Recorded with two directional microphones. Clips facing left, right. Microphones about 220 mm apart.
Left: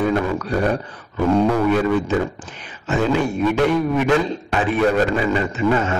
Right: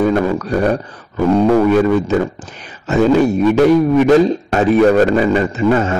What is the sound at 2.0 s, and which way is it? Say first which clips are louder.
A man's voice: right 4 dB; 40° right (ahead or behind).